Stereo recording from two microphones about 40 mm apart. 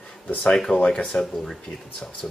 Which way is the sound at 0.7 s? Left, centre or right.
Left.